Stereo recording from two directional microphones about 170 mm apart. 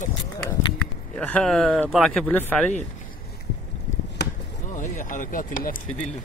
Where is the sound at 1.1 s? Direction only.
5° left (ahead or behind).